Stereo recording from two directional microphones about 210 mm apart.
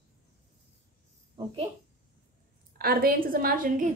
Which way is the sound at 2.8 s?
45° right (ahead or behind).